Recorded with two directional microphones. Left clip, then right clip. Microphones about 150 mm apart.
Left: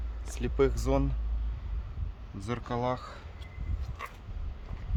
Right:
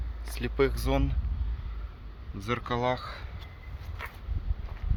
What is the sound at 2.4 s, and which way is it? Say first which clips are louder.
Speech: right 3 dB; 10° left (ahead or behind).